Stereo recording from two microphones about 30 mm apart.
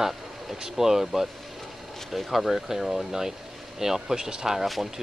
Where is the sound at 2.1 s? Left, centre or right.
Centre.